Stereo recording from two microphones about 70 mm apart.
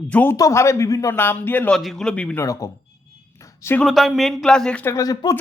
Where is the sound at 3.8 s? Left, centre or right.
Centre.